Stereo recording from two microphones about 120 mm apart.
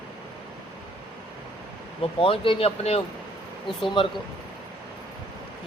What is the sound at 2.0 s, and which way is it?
Speech, 50° left (ahead or behind).